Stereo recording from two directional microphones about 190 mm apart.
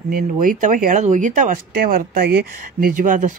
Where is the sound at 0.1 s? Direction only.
45° right (ahead or behind).